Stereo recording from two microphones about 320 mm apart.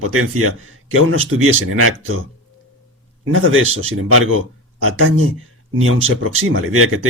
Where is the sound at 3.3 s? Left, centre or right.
Right.